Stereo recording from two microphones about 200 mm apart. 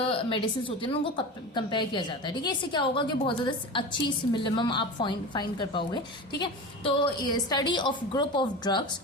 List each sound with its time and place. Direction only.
0.1 s a woman's voice: 25° left (ahead or behind)